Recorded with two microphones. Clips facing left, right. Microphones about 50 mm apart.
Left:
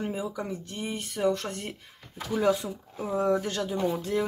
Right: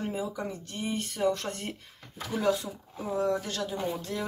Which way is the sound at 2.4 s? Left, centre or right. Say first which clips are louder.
Left 2 dB; left.